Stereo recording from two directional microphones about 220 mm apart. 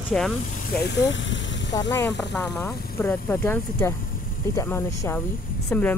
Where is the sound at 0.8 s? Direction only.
55° left (ahead or behind).